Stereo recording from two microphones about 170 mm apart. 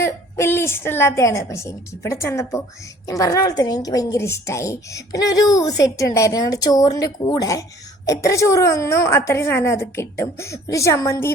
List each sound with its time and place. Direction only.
0.0 s a woman's voice: 15° left (ahead or behind)